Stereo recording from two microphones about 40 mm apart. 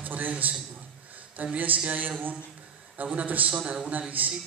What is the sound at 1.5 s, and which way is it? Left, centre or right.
A man's voice, right.